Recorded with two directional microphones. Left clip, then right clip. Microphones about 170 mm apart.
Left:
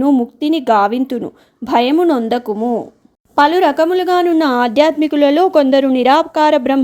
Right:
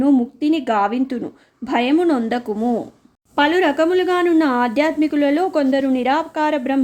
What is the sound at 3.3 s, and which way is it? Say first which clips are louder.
A woman's voice: left 5 dB; 30° left (ahead or behind).